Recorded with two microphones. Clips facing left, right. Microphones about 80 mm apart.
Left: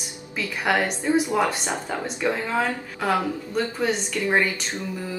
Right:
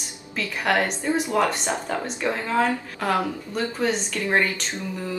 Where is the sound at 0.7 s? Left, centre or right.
Centre.